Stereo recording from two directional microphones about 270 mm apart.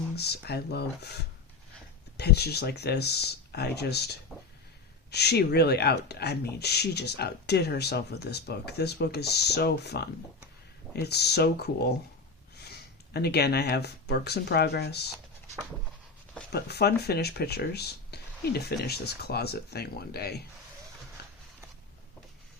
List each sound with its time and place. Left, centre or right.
0.2 s speech: left
16.5 s speech: left